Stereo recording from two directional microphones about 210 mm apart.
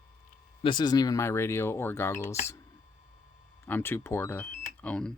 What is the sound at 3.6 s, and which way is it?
Speech, 10° left (ahead or behind).